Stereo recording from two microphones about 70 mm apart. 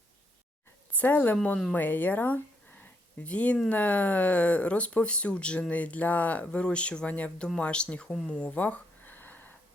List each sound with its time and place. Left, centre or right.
0.9 s speech: left